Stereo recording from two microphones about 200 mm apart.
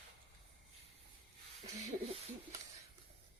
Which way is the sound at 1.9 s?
30° right (ahead or behind).